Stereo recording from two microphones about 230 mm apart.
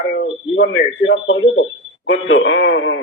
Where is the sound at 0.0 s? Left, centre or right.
Left.